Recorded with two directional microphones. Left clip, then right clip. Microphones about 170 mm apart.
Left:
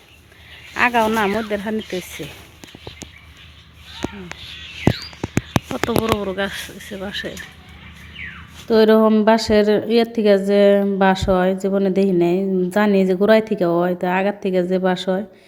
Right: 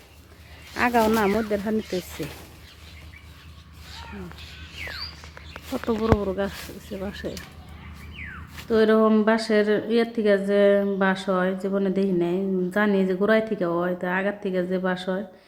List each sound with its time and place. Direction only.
0.7 s speech: 5° left (ahead or behind)
5.7 s a woman's voice: 20° left (ahead or behind)
6.3 s speech: 5° left (ahead or behind)
8.6 s a woman's voice: 25° left (ahead or behind)